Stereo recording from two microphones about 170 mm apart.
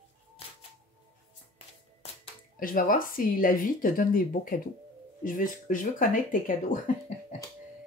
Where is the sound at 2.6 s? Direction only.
55° left (ahead or behind).